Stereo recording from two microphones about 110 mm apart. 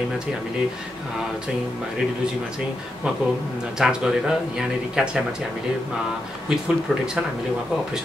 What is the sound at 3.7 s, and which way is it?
Speech, 5° right (ahead or behind).